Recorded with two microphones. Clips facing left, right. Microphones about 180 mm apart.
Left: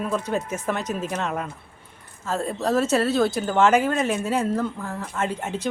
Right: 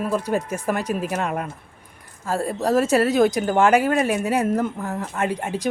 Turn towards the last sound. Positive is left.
turn(degrees=-10)  # may be behind; listen again after turning